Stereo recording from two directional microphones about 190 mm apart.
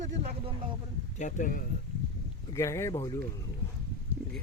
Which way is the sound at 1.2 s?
45° left (ahead or behind).